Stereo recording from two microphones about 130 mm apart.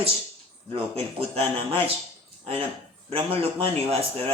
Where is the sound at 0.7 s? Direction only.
45° right (ahead or behind).